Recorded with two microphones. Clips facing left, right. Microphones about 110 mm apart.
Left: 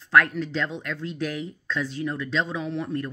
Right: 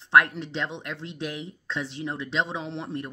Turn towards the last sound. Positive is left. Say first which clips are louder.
# left 4 dB
turn(degrees=-25)  # may be behind; listen again after turning